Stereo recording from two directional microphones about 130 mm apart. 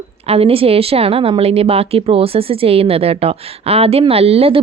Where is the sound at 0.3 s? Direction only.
50° right (ahead or behind).